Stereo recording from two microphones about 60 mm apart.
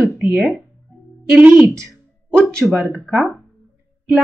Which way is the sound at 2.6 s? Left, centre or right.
Centre.